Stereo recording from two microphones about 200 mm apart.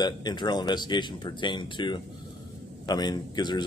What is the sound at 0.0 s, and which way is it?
Speech, 20° left (ahead or behind).